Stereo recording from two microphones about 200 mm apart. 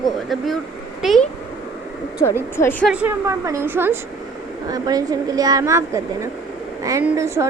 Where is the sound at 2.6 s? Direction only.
10° left (ahead or behind).